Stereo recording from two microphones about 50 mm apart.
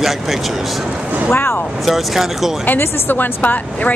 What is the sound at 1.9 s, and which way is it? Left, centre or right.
Speech, centre.